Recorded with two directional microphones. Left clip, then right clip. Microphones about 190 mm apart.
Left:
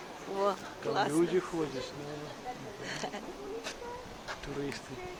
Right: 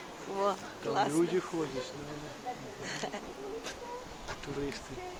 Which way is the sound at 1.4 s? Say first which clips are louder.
Left 2 dB; 10° left (ahead or behind).